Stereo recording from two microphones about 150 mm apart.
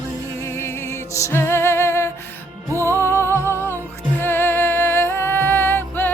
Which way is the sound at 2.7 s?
20° right (ahead or behind).